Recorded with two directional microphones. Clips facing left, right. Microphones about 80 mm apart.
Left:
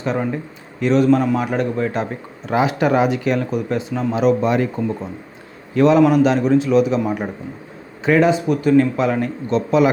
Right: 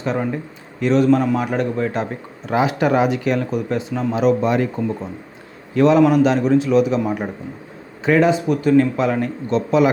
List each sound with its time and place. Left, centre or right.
0.0 s a man's voice: left